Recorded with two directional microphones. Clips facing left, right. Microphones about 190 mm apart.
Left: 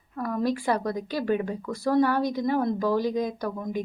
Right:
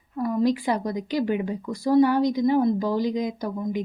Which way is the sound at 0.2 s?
15° right (ahead or behind).